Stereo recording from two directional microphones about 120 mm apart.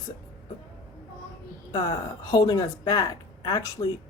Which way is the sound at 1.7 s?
35° left (ahead or behind).